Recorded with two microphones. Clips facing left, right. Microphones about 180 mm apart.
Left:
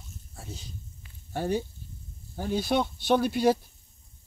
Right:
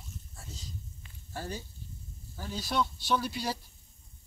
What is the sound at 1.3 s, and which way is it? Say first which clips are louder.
Speech: left 11 dB; 60° left (ahead or behind).